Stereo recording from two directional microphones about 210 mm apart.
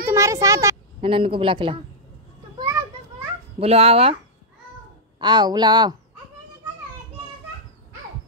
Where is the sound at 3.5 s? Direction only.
30° right (ahead or behind).